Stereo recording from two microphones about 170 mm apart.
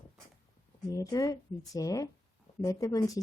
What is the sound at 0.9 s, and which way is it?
Speech, 20° left (ahead or behind).